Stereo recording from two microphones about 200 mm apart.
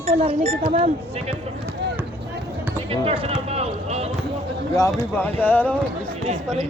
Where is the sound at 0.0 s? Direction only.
30° right (ahead or behind).